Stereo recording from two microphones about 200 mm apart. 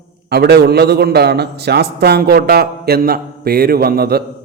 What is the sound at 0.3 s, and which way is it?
A man's voice, 55° right (ahead or behind).